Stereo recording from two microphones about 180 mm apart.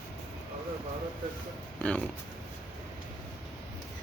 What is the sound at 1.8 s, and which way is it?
Speech, 5° left (ahead or behind).